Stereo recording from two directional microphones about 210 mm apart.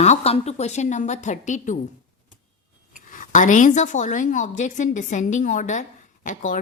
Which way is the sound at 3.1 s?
35° left (ahead or behind).